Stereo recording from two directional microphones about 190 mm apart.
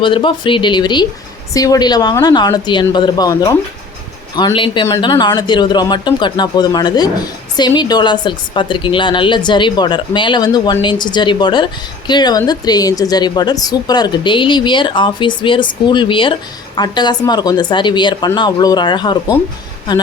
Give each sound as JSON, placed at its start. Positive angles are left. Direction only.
{"t": 0.0, "sound": "a woman's voice", "side_deg": 25}